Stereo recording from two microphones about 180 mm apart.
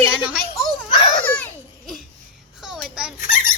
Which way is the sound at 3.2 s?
50° left (ahead or behind).